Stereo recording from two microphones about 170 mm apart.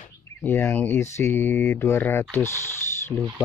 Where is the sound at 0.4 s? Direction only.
15° left (ahead or behind).